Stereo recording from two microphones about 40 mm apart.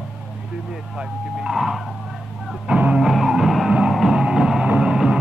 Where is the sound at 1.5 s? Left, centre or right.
Centre.